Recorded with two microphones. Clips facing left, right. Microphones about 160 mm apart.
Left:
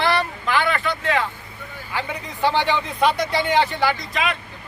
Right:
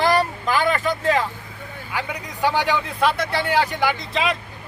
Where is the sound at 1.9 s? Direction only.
10° right (ahead or behind).